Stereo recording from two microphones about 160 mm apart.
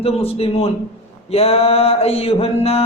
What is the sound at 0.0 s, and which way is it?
A man's voice, 35° left (ahead or behind).